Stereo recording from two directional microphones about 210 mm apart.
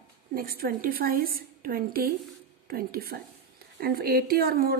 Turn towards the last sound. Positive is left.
turn(degrees=-45)  # may be behind; listen again after turning